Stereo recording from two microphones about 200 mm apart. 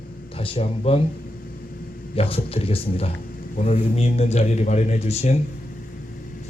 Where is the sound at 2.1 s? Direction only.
30° left (ahead or behind).